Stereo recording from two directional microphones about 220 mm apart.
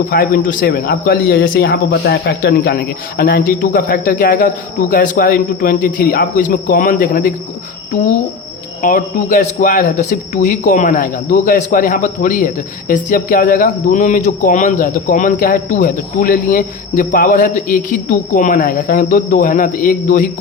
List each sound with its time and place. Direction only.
0.1 s speech: 40° left (ahead or behind)